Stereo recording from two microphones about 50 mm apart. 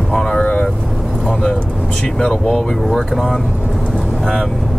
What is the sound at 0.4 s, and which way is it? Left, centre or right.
Vehicle, left.